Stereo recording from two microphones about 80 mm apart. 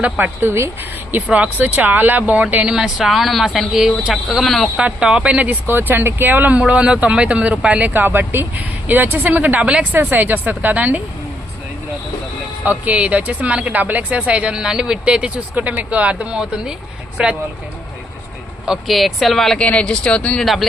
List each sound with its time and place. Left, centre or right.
0.0 s speech: right
1.1 s speech: right
2.7 s speech: centre
4.8 s speech: centre
9.9 s speech: right
12.6 s a woman's voice: centre
18.6 s speech: centre
20.4 s speech: centre